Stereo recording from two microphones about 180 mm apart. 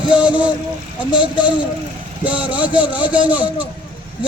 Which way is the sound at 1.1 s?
25° left (ahead or behind).